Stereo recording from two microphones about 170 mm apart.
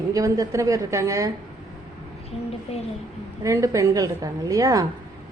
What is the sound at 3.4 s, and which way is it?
A woman's voice, 20° right (ahead or behind).